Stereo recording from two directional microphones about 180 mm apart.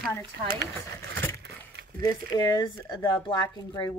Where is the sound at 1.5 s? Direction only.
65° right (ahead or behind).